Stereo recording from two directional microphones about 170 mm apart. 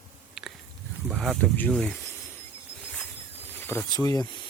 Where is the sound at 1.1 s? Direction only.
Centre (ahead or behind).